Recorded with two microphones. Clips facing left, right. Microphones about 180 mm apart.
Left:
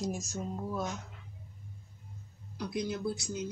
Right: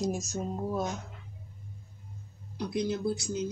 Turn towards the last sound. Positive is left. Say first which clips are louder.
# right 4 dB
turn(degrees=-30)  # may be behind; listen again after turning